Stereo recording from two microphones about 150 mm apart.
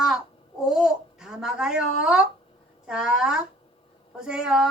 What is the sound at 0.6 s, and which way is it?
A woman's voice, 5° right (ahead or behind).